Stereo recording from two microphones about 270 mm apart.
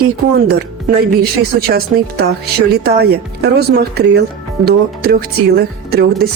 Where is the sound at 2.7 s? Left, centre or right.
Right.